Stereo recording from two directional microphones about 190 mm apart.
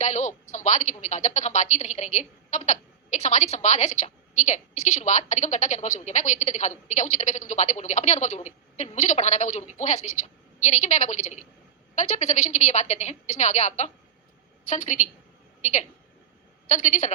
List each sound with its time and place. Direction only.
0.0 s a woman's voice: 40° left (ahead or behind)